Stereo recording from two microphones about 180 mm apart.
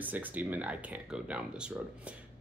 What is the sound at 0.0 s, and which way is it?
Speech, 10° right (ahead or behind).